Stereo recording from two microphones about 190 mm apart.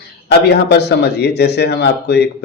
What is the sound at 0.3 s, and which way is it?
Speech, 60° left (ahead or behind).